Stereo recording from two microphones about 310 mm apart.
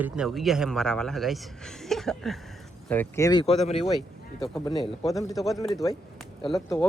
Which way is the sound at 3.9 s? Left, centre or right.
Centre.